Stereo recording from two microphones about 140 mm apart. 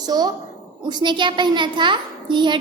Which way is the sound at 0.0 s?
30° right (ahead or behind).